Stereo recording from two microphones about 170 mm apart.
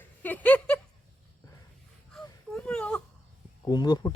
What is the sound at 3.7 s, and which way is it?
Speech, 25° left (ahead or behind).